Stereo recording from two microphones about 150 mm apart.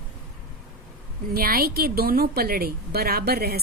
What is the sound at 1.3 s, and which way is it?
Speech, 80° right.